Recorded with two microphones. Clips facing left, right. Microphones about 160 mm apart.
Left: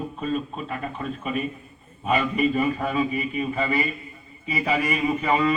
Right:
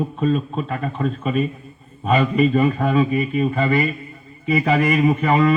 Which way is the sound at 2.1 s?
35° right (ahead or behind).